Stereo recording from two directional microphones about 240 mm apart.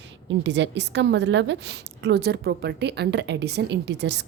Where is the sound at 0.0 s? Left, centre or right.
Right.